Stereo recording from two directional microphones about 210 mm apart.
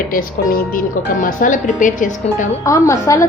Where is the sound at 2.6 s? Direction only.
15° left (ahead or behind).